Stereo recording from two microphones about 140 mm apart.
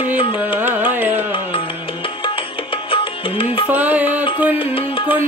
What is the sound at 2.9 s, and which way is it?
Music, 40° left (ahead or behind).